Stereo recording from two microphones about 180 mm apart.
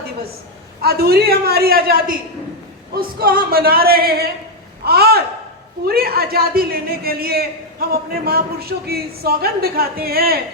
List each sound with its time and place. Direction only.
0.8 s a man's voice: 60° right (ahead or behind)